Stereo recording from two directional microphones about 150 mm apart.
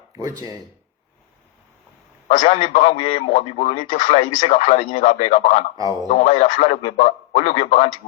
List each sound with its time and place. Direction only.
0.1 s speech: 25° right (ahead or behind)
2.2 s a man's voice: 65° left (ahead or behind)
2.5 s a man's voice: 45° left (ahead or behind)
3.9 s speech: 60° left (ahead or behind)
4.4 s a man's voice: 45° left (ahead or behind)